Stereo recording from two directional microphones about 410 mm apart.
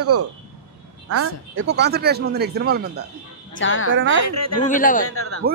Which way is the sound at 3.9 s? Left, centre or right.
Right.